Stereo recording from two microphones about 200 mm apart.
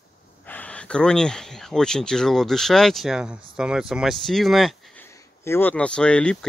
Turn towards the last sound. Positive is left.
turn(degrees=5)  # may be behind; listen again after turning